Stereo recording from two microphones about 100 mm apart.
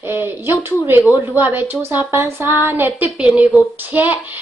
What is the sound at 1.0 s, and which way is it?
Speech, 30° left (ahead or behind).